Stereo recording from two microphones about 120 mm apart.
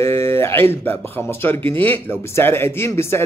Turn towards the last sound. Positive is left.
turn(degrees=20)  # may be behind; listen again after turning